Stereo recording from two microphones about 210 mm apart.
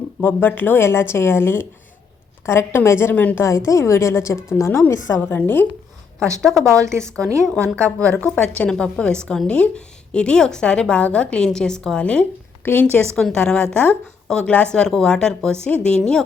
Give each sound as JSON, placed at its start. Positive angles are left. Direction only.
{"t": 0.2, "sound": "a woman's voice", "side_deg": 10}
{"t": 6.7, "sound": "a woman's voice", "side_deg": -15}
{"t": 7.9, "sound": "a woman's voice", "side_deg": 5}